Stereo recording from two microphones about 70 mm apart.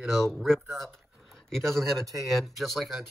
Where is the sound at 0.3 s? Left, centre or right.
Centre.